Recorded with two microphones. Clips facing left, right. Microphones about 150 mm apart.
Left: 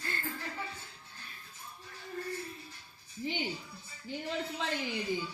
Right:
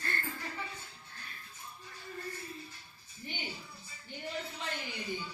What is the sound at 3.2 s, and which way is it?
Music, 90° left.